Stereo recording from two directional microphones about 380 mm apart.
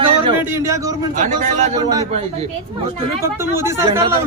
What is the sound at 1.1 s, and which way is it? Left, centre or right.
A man's voice, centre.